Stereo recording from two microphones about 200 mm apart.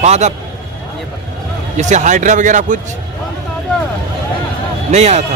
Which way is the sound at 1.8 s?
35° right (ahead or behind).